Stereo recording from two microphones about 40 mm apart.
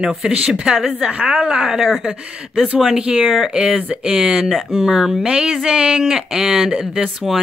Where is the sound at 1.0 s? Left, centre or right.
Right.